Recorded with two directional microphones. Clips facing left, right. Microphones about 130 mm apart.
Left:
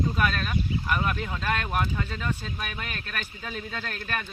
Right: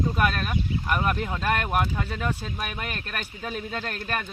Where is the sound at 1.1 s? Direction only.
20° right (ahead or behind).